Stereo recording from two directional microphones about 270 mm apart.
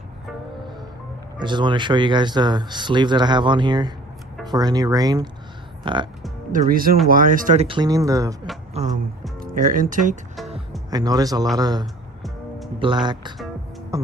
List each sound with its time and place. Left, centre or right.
1.4 s speech: centre
6.5 s speech: right; by 8.4 s centre
8.7 s music: right
9.4 s speech: right
10.9 s speech: centre
11.8 s music: centre
12.7 s speech: centre
13.9 s music: centre